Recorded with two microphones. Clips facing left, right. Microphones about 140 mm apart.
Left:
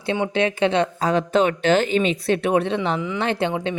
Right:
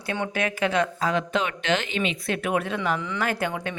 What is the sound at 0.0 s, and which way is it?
Speech, 25° left (ahead or behind).